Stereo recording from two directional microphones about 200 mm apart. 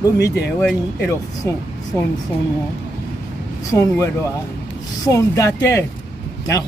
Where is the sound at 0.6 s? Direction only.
10° left (ahead or behind).